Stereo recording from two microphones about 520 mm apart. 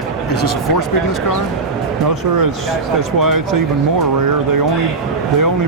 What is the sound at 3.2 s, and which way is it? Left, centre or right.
Speech, right.